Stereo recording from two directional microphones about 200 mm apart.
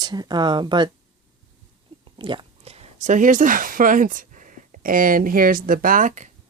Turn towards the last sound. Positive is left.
turn(degrees=-40)  # may be behind; listen again after turning